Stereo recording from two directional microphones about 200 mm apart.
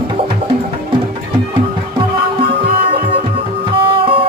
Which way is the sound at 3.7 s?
25° right (ahead or behind).